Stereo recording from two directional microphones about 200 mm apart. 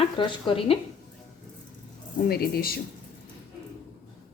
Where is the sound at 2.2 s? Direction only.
50° left (ahead or behind).